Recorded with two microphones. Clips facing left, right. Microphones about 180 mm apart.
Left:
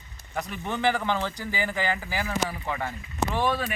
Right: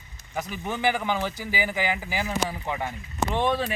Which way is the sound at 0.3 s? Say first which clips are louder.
Even; 5° right (ahead or behind).